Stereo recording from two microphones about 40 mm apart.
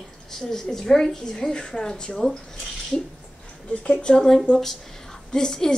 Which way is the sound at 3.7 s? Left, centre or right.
Left.